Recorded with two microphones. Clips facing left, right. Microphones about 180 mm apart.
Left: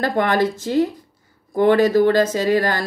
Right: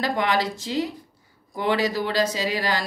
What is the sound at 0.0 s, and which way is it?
Speech, 50° left (ahead or behind).